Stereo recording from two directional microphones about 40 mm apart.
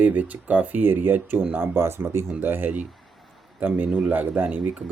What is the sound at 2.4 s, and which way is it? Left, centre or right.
Speech, right.